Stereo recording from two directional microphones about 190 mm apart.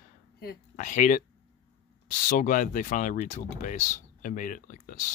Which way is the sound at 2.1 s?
45° left (ahead or behind).